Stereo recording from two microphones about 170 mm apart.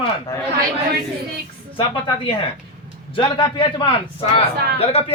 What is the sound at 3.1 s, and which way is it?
A man's voice, 30° left (ahead or behind).